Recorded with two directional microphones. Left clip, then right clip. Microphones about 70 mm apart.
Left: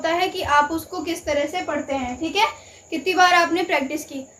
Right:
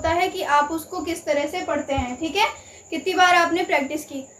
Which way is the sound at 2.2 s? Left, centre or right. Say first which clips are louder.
Left 2 dB; left.